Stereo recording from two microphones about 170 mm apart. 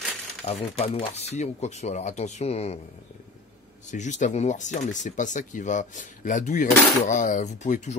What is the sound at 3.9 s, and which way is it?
Speech, 45° left (ahead or behind).